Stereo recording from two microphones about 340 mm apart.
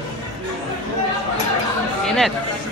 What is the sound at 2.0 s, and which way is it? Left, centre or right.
Chatter, centre.